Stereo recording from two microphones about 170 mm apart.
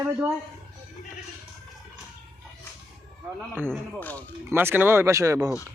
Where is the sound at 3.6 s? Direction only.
5° left (ahead or behind).